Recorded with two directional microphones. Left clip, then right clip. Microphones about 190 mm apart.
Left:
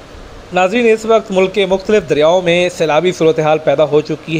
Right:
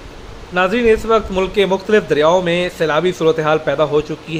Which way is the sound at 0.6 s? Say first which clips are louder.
Left 2 dB; 20° left (ahead or behind).